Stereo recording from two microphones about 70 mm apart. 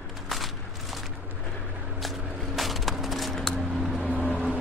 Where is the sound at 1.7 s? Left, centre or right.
Right.